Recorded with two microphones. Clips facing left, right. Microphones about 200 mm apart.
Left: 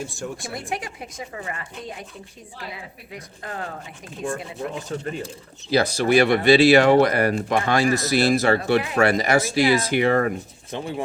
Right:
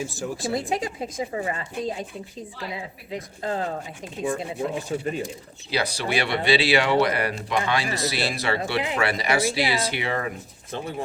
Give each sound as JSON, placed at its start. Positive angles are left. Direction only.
{"t": 0.0, "sound": "speech", "side_deg": 0}
{"t": 0.5, "sound": "a woman's voice", "side_deg": -25}
{"t": 3.4, "sound": "a woman's voice", "side_deg": -25}
{"t": 4.9, "sound": "speech", "side_deg": -10}
{"t": 5.7, "sound": "speech", "side_deg": 45}
{"t": 10.7, "sound": "speech", "side_deg": 20}